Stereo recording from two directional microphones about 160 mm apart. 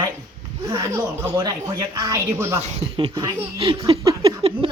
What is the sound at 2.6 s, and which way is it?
Speech, 30° right (ahead or behind).